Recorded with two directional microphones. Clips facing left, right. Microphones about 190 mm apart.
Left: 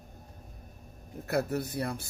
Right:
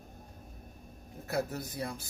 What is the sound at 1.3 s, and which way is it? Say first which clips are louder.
Speech: left 4 dB; 65° left (ahead or behind).